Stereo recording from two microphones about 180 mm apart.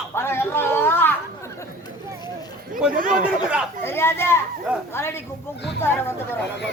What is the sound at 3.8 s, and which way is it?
A woman's voice, 15° left (ahead or behind).